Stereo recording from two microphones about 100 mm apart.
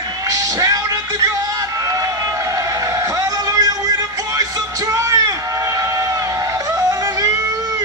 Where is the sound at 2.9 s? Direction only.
35° right (ahead or behind).